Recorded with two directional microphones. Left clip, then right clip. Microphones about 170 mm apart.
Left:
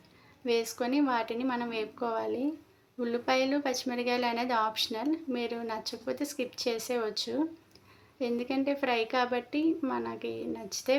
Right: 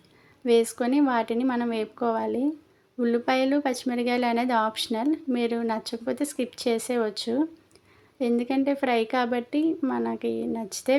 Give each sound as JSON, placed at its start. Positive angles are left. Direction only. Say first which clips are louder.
{"t": 0.4, "sound": "speech", "louder": "right 8 dB", "side_deg": -35}